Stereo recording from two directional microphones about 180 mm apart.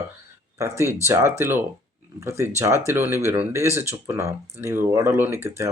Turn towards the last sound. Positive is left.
turn(degrees=-15)  # may be behind; listen again after turning